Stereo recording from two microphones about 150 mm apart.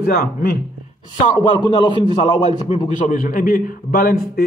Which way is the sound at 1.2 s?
30° left (ahead or behind).